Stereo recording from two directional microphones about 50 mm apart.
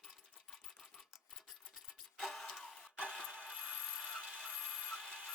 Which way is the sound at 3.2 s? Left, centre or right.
Right.